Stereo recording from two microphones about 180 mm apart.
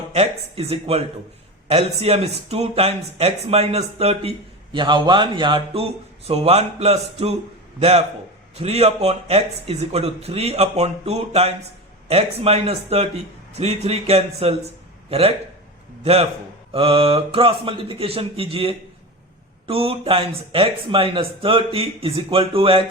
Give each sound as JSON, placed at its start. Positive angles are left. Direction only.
{"t": 0.1, "sound": "speech", "side_deg": -35}
{"t": 16.7, "sound": "speech", "side_deg": -30}